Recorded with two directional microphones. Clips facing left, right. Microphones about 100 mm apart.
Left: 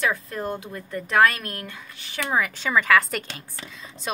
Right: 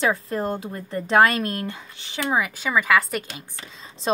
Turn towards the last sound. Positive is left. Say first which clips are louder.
# left 1 dB
turn(degrees=-30)  # may be behind; listen again after turning